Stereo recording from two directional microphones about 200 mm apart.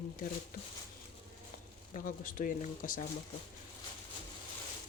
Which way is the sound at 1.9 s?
40° left (ahead or behind).